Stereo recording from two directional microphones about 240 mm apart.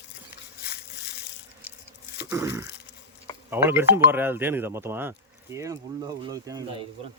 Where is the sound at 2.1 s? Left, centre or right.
Centre.